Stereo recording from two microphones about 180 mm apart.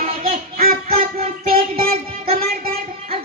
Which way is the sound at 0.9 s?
35° right (ahead or behind).